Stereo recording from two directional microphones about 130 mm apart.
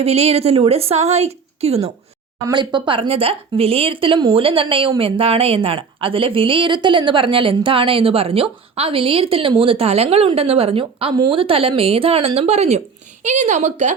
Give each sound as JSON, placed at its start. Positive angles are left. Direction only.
{"t": 0.0, "sound": "a woman's voice", "side_deg": -50}
{"t": 2.5, "sound": "a woman's voice", "side_deg": -35}